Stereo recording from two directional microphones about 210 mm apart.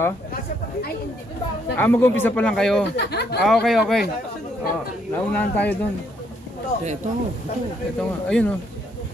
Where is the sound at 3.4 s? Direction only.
Centre (ahead or behind).